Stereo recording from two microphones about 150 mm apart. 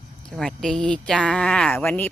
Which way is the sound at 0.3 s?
Centre (ahead or behind).